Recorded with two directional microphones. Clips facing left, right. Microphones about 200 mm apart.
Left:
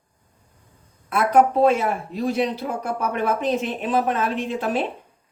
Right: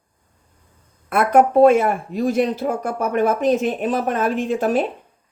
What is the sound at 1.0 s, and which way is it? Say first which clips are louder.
Speech: right 2 dB; 55° right (ahead or behind).